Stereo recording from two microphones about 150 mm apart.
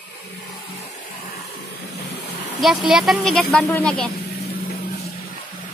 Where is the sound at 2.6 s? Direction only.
Centre (ahead or behind).